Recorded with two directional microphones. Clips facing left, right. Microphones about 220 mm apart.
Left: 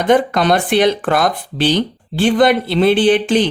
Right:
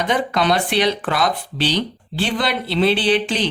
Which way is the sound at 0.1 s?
50° left (ahead or behind).